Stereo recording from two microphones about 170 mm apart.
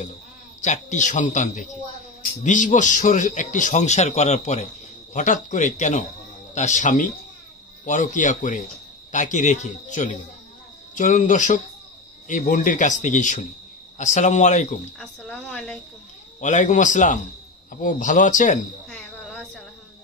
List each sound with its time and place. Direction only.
0.6 s a man's voice: 45° left (ahead or behind)
15.0 s a woman's voice: 5° left (ahead or behind)
16.3 s a man's voice: 45° left (ahead or behind)
18.9 s cricket: 5° left (ahead or behind)